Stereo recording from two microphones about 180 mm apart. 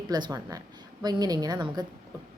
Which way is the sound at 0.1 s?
20° right (ahead or behind).